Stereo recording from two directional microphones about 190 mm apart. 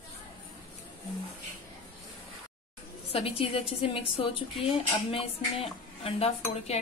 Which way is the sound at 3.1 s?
30° left (ahead or behind).